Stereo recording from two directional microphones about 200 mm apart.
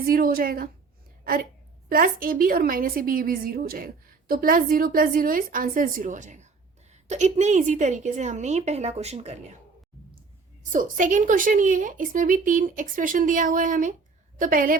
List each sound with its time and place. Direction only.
0.0 s a woman's voice: 45° right (ahead or behind)
10.6 s a woman's voice: 40° right (ahead or behind)